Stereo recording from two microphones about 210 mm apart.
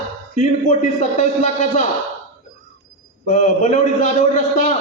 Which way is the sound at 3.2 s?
35° left (ahead or behind).